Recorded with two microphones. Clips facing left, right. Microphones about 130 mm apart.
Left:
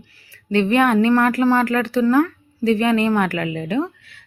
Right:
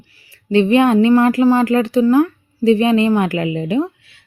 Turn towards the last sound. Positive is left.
turn(degrees=-20)  # may be behind; listen again after turning